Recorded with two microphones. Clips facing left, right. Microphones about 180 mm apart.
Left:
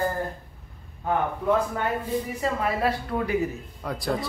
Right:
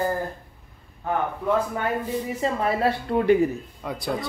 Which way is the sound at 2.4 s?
25° right (ahead or behind).